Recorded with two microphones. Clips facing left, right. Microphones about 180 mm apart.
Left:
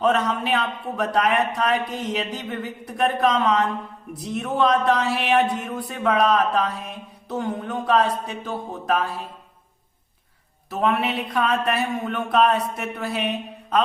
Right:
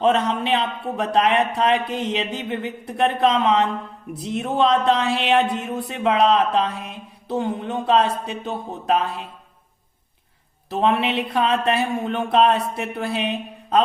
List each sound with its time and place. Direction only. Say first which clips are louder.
0.0 s speech: right 2 dB; 25° right (ahead or behind)
10.7 s speech: right 2 dB; 25° right (ahead or behind)